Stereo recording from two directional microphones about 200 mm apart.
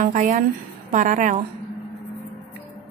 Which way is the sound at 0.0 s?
40° right (ahead or behind).